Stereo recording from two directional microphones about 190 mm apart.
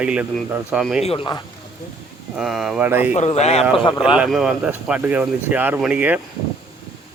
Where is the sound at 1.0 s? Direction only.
25° left (ahead or behind).